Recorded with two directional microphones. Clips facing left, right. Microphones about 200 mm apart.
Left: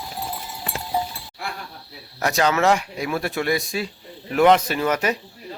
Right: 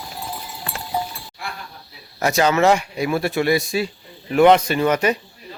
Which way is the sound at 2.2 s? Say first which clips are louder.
Right 3 dB; centre (ahead or behind).